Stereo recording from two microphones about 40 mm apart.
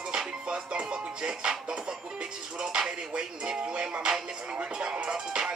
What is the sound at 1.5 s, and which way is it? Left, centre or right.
Music, centre.